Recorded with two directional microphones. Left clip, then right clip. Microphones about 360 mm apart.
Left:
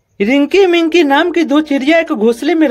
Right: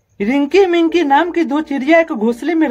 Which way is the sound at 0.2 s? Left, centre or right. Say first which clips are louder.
Left 3 dB; left.